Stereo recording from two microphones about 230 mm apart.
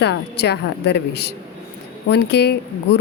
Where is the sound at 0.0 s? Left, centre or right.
Left.